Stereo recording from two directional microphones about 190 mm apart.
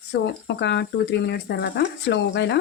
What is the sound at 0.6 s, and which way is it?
Speech, 65° left (ahead or behind).